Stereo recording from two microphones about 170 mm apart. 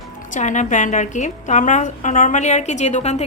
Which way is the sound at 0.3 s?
45° left (ahead or behind).